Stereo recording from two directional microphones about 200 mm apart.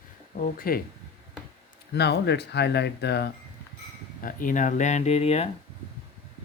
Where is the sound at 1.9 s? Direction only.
55° left (ahead or behind).